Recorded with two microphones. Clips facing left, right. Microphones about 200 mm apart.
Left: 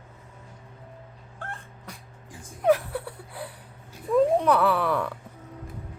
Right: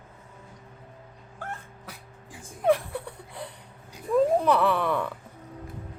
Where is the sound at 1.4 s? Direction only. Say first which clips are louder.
Right 2 dB; 5° right (ahead or behind).